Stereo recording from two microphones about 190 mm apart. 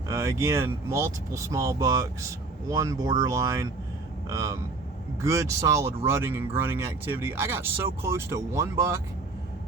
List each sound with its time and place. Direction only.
0.1 s speech: 15° right (ahead or behind)